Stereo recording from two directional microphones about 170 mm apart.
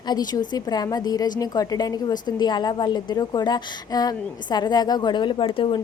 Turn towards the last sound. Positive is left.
turn(degrees=30)  # may be behind; listen again after turning